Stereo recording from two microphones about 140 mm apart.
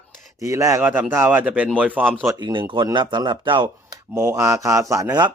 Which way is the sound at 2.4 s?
35° right (ahead or behind).